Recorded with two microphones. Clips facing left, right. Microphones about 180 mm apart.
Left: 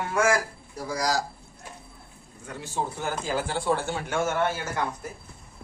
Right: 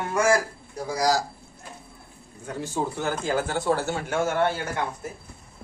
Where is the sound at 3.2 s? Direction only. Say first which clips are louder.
Right 2 dB; 55° right (ahead or behind); by 4.9 s 30° right (ahead or behind).